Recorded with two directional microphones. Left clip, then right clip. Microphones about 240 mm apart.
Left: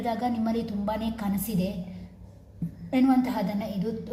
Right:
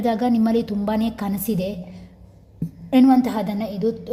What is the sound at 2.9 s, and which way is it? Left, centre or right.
Speech, right.